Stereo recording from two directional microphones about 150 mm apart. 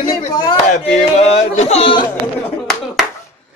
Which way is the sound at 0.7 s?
45° left (ahead or behind).